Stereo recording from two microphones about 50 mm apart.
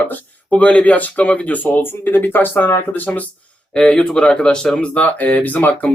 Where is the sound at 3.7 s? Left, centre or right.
Centre.